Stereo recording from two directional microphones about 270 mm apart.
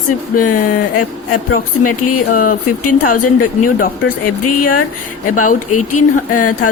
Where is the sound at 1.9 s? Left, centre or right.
Left.